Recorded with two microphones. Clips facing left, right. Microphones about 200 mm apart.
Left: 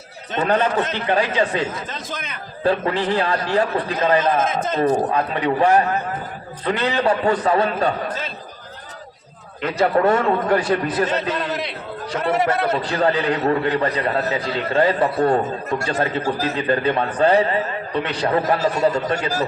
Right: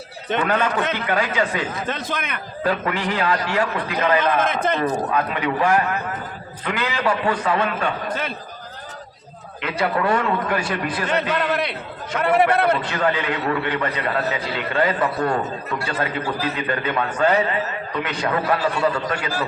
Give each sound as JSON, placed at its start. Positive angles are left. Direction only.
{"t": 0.4, "sound": "a man's voice", "side_deg": 35}
{"t": 1.9, "sound": "a man's voice", "side_deg": -60}
{"t": 2.6, "sound": "a man's voice", "side_deg": 30}
{"t": 4.4, "sound": "a man's voice", "side_deg": -60}
{"t": 4.8, "sound": "a man's voice", "side_deg": 30}
{"t": 9.6, "sound": "a man's voice", "side_deg": 40}
{"t": 12.2, "sound": "a man's voice", "side_deg": -60}
{"t": 12.8, "sound": "a man's voice", "side_deg": 35}